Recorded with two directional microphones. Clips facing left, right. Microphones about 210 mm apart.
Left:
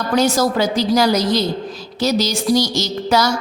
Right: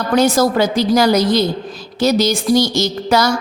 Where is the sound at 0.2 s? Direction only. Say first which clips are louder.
Right 3 dB; 55° right (ahead or behind).